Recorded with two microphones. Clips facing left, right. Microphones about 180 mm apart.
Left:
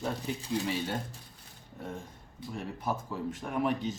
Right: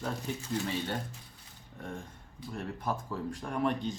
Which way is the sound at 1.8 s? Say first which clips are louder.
Left 1 dB; centre (ahead or behind).